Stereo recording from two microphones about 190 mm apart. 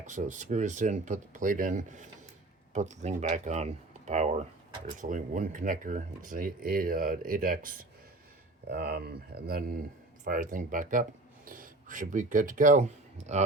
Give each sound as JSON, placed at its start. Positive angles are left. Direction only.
{"t": 0.0, "sound": "speech", "side_deg": -40}